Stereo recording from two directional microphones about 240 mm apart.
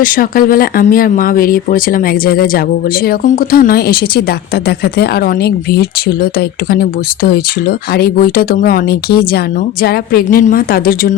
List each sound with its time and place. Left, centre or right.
0.0 s speech: left